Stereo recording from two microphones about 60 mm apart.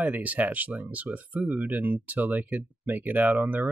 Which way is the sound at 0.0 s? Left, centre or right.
Right.